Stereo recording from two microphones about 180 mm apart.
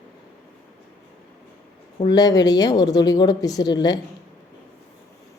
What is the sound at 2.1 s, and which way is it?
A woman's voice, 20° left (ahead or behind).